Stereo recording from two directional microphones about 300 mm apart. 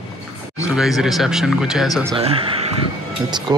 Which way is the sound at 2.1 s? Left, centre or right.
Centre.